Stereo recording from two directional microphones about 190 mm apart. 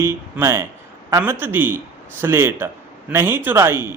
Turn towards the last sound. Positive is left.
turn(degrees=-15)  # may be behind; listen again after turning